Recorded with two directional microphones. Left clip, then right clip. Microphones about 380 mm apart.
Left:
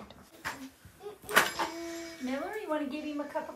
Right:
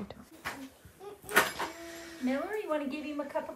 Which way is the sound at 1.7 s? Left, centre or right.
Centre.